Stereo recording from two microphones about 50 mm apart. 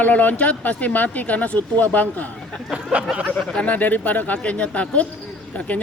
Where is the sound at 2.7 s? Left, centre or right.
Right.